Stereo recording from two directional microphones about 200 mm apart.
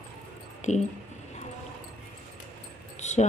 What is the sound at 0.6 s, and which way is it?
Speech, 35° left (ahead or behind).